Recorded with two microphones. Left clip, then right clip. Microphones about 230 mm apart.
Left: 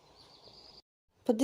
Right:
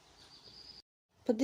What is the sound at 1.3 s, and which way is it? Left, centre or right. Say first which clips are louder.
Speech: left 3 dB; left.